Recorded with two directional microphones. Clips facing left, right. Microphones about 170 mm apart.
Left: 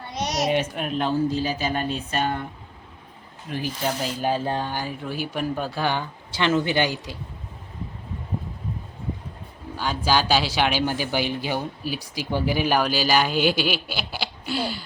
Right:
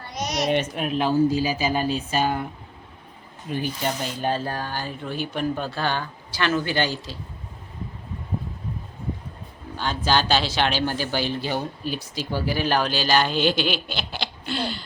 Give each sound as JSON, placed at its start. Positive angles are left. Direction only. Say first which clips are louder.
{"t": 0.1, "sound": "a sound", "louder": "left 1 dB", "side_deg": 35}
{"t": 0.4, "sound": "speech", "louder": "right 2 dB", "side_deg": 0}
{"t": 3.5, "sound": "speech", "louder": "even", "side_deg": 5}
{"t": 4.4, "sound": "speech", "louder": "left 3 dB", "side_deg": 20}
{"t": 9.7, "sound": "speech", "louder": "even", "side_deg": 10}